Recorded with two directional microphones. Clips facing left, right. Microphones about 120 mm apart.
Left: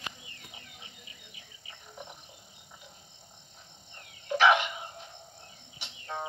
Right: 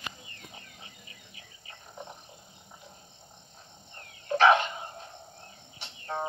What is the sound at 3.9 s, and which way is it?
Dog, 35° right (ahead or behind).